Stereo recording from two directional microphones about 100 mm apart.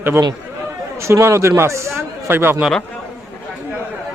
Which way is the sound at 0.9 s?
30° right (ahead or behind).